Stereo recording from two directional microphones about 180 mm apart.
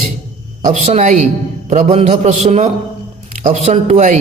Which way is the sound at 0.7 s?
40° right (ahead or behind).